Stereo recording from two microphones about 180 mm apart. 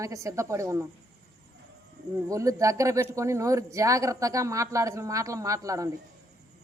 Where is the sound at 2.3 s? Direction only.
15° right (ahead or behind).